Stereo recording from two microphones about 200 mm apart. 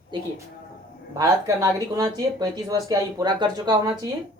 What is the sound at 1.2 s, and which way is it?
Speech, 15° right (ahead or behind).